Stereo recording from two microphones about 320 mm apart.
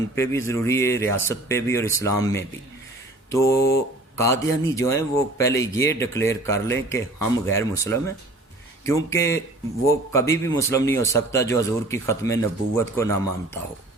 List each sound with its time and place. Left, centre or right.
0.2 s a man's voice: centre